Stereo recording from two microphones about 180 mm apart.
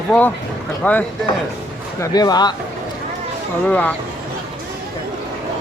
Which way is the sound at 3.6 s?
10° left (ahead or behind).